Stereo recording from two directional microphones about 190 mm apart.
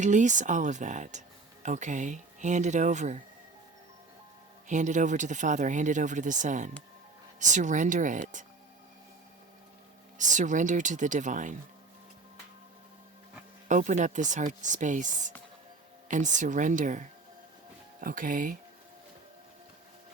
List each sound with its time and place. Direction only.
0.0 s speech: 40° right (ahead or behind)
4.7 s speech: 40° right (ahead or behind)
10.2 s speech: 40° right (ahead or behind)
13.7 s speech: 40° right (ahead or behind)